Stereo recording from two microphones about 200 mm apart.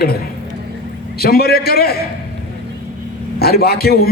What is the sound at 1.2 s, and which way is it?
Speech, 50° left (ahead or behind).